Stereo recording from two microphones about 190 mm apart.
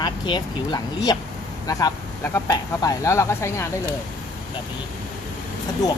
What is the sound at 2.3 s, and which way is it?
Speech, 15° left (ahead or behind).